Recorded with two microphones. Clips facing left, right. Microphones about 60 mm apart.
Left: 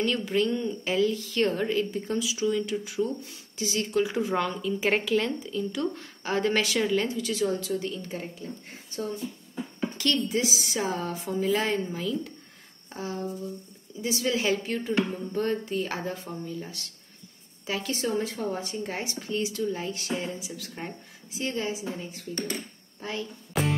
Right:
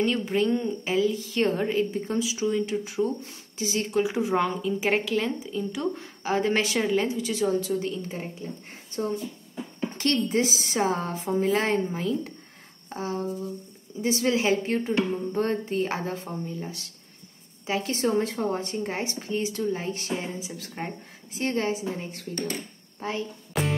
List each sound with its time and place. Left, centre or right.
0.3 s speech: right
0.9 s speech: centre
1.2 s speech: right
4.8 s speech: centre
5.4 s speech: centre
9.9 s a woman's voice: right
12.9 s a sound: right
14.0 s a woman's voice: right
18.9 s a woman's voice: right
22.9 s speech: right
23.5 s music: centre